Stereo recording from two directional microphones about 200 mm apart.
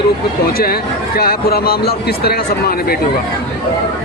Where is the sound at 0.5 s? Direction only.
50° left (ahead or behind).